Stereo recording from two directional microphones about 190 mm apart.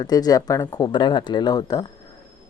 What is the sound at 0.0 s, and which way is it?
Speech, 20° left (ahead or behind).